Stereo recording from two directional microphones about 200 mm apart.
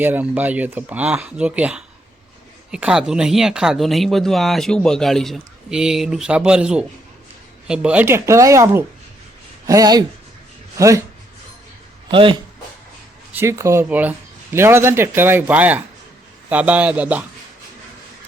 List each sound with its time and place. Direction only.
0.0 s speech: 10° right (ahead or behind)
12.1 s speech: 25° right (ahead or behind)
13.3 s speech: 15° right (ahead or behind)